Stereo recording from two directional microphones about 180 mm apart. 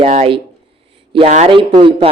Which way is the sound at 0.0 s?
35° right (ahead or behind).